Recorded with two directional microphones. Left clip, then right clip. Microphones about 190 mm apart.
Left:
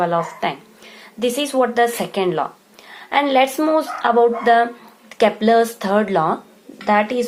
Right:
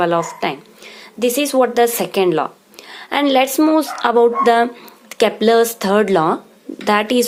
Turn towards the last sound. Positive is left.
turn(degrees=-45)  # may be behind; listen again after turning